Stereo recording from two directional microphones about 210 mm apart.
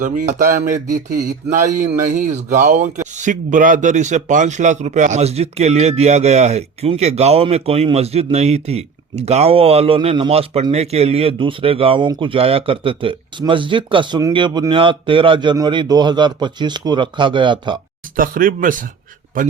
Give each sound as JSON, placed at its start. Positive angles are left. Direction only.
{"t": 0.0, "sound": "speech", "side_deg": -40}
{"t": 18.2, "sound": "speech", "side_deg": -40}